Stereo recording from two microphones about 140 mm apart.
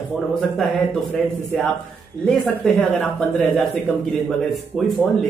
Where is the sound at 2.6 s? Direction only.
Centre (ahead or behind).